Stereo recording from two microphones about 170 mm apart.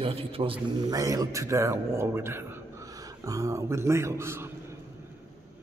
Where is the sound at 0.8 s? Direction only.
20° right (ahead or behind).